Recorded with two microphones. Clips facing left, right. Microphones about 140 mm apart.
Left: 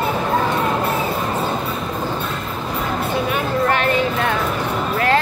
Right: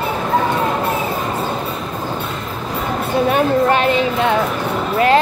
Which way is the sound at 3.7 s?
20° right (ahead or behind).